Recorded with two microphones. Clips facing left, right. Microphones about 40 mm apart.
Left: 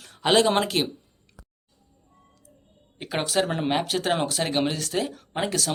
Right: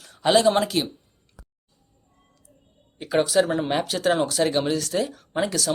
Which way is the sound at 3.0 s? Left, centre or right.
Left.